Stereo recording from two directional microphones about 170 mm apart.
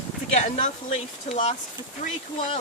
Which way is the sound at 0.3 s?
45° left (ahead or behind).